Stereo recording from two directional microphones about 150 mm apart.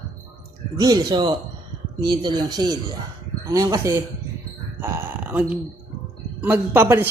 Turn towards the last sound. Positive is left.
turn(degrees=-15)  # may be behind; listen again after turning